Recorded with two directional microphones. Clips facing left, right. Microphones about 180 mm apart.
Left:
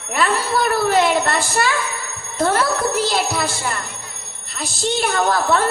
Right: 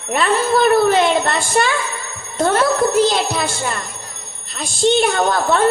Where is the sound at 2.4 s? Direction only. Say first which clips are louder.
Right 3 dB; 25° right (ahead or behind).